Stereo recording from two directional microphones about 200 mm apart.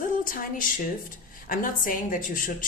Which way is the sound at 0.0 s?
45° left (ahead or behind).